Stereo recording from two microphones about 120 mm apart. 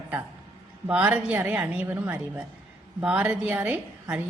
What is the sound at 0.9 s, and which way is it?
A woman's voice, 10° right (ahead or behind).